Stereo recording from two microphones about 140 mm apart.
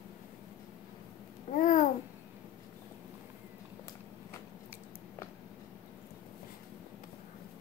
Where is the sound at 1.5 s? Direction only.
70° left (ahead or behind).